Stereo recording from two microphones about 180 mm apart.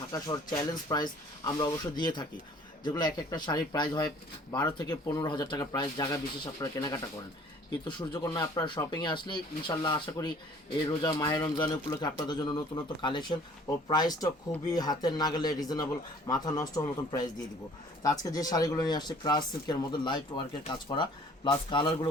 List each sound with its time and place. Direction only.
0.1 s speech: 20° left (ahead or behind)